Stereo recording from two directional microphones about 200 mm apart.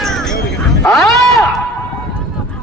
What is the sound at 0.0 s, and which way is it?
Music, centre (ahead or behind).